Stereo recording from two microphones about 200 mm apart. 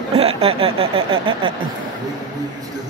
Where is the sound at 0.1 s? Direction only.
30° right (ahead or behind).